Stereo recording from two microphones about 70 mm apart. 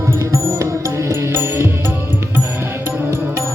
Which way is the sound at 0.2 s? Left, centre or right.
Right.